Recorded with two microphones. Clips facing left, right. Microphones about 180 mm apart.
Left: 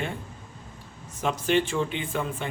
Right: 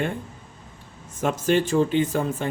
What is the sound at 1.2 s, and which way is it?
Speech, 45° right (ahead or behind).